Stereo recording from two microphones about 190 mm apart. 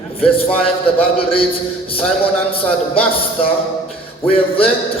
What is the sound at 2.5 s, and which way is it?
Speech, 30° left (ahead or behind).